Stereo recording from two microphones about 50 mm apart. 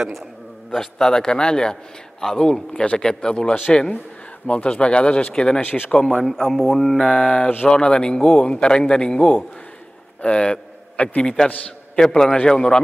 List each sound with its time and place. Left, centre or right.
0.7 s a man's voice: centre
5.6 s speech: left
6.0 s a man's voice: centre
7.1 s a man's voice: left
11.9 s a man's voice: centre